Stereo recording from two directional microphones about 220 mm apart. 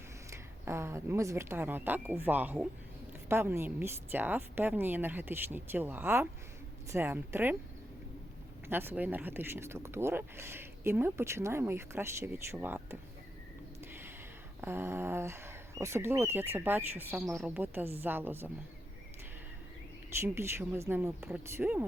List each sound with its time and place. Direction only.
0.3 s speech: 10° right (ahead or behind)
8.6 s speech: 10° right (ahead or behind)
14.6 s speech: 10° right (ahead or behind)
20.2 s speech: 10° right (ahead or behind)